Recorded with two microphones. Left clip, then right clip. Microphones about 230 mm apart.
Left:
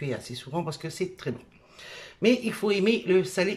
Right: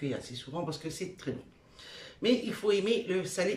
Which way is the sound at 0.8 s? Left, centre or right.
Left.